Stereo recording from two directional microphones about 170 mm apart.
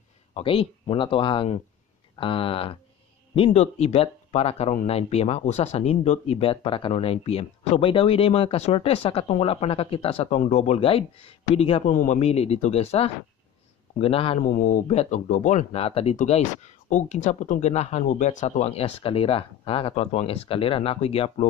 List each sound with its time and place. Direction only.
0.3 s speech: 30° left (ahead or behind)
11.9 s speech: 50° left (ahead or behind); by 14.4 s 35° left (ahead or behind)
14.4 s speech: 50° left (ahead or behind); by 21.5 s 35° left (ahead or behind)